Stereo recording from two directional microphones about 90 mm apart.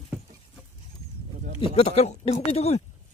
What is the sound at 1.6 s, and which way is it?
Speech, 90° left.